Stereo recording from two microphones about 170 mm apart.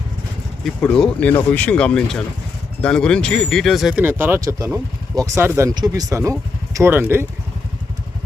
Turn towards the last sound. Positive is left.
turn(degrees=-10)  # may be behind; listen again after turning